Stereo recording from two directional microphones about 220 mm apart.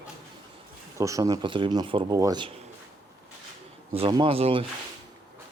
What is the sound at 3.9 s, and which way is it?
Speech, 20° right (ahead or behind).